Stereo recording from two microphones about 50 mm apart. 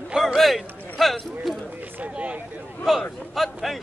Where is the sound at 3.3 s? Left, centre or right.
Centre.